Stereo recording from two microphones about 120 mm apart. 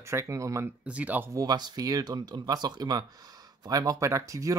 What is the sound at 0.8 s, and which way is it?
Speech, 10° right (ahead or behind).